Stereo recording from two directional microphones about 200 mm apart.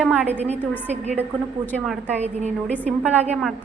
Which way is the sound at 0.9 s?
35° right (ahead or behind).